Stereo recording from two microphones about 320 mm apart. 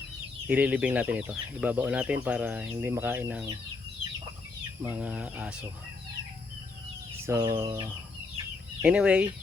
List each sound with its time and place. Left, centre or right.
0.4 s speech: centre
4.8 s speech: centre
7.3 s chicken: centre
8.8 s speech: centre